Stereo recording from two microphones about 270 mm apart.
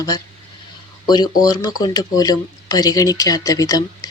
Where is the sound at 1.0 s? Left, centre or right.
Centre.